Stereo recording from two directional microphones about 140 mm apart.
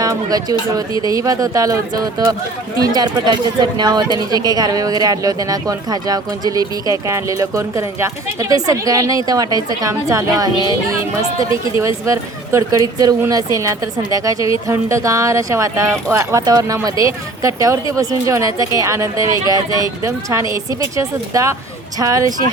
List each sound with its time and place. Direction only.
0.0 s speech: 25° right (ahead or behind)
12.0 s speech: 20° right (ahead or behind)